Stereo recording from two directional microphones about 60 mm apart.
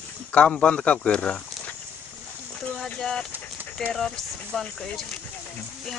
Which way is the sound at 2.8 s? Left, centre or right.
Centre.